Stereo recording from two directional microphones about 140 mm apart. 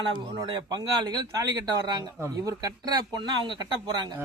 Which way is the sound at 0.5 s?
30° right (ahead or behind).